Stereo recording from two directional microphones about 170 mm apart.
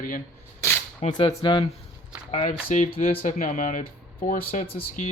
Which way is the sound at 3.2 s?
50° left (ahead or behind).